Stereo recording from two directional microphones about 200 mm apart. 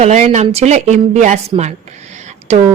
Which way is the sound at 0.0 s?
35° right (ahead or behind).